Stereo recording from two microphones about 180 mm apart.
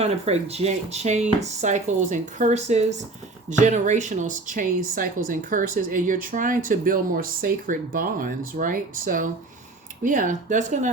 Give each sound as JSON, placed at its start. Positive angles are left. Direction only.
{"t": 0.0, "sound": "speech", "side_deg": -35}